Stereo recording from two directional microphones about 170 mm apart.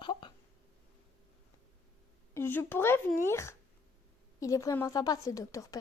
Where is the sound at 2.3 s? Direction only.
10° left (ahead or behind).